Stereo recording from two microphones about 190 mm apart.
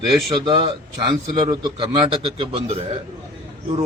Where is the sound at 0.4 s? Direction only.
25° right (ahead or behind).